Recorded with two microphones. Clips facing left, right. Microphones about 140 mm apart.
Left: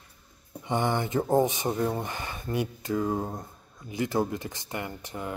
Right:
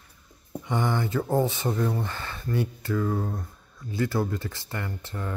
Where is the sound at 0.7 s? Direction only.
20° left (ahead or behind).